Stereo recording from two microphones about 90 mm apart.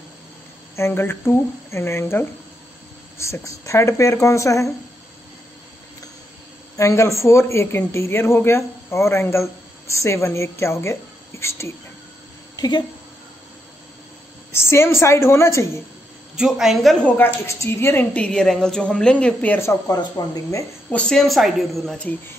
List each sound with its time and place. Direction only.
0.7 s speech: 30° left (ahead or behind)
6.8 s speech: 35° left (ahead or behind)
12.5 s speech: 50° left (ahead or behind)
14.5 s speech: 30° left (ahead or behind)
16.3 s a woman's voice: 5° right (ahead or behind)
17.5 s speech: 30° left (ahead or behind)
18.1 s a woman's voice: 10° left (ahead or behind)
19.9 s speech: 45° left (ahead or behind)
20.9 s a woman's voice: 10° left (ahead or behind)